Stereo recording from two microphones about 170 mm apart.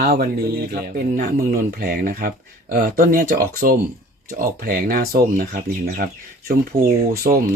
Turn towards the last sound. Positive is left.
turn(degrees=-60)  # may be behind; listen again after turning